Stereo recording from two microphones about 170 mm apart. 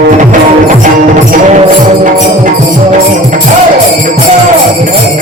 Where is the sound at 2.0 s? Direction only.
45° right (ahead or behind).